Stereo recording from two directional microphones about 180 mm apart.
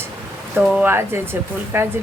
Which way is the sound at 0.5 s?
5° right (ahead or behind).